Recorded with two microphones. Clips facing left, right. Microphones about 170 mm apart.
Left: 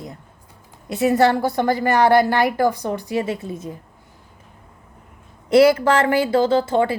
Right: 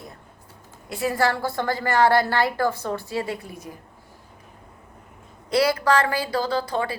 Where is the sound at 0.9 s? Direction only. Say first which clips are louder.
Left 7 dB; 20° left (ahead or behind).